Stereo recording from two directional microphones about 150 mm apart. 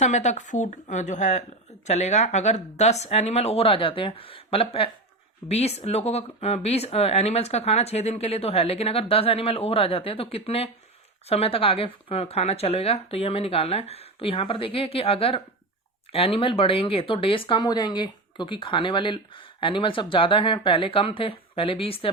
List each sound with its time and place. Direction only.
0.0 s speech: 50° left (ahead or behind)